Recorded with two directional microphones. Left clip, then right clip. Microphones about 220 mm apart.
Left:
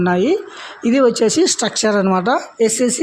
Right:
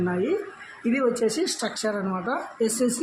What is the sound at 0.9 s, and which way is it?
Speech, 40° left (ahead or behind).